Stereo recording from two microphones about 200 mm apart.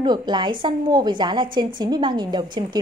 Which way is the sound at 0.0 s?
20° right (ahead or behind).